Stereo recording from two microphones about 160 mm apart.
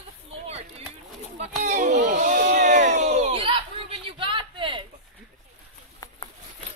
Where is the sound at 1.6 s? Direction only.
50° right (ahead or behind); by 4.9 s 30° right (ahead or behind).